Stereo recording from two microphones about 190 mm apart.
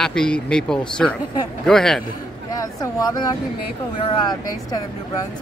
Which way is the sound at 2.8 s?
20° left (ahead or behind).